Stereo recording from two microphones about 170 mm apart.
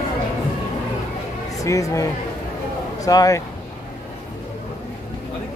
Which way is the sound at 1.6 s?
20° left (ahead or behind).